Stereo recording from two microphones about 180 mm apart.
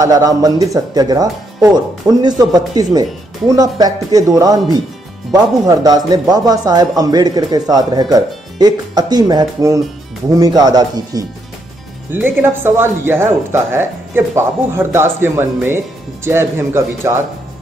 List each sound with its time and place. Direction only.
0.0 s speech: 20° right (ahead or behind)